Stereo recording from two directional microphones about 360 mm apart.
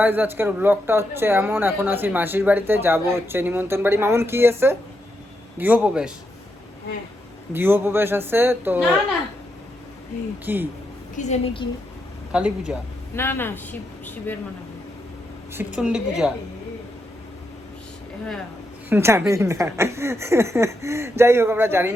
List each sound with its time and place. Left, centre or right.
0.0 s speech: centre
7.5 s speech: centre
10.4 s speech: centre
11.1 s a woman's voice: centre
12.3 s speech: centre
15.5 s speech: centre
18.9 s speech: centre